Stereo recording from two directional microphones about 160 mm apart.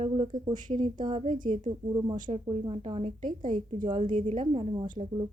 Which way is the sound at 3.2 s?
55° right (ahead or behind).